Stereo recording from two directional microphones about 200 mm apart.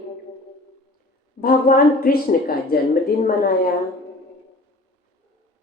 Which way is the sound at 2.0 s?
45° left (ahead or behind).